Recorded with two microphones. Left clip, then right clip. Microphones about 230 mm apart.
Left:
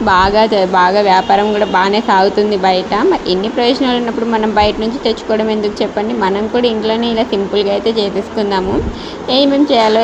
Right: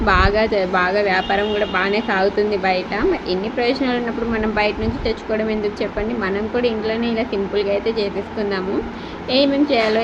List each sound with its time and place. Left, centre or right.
0.0 s speech: centre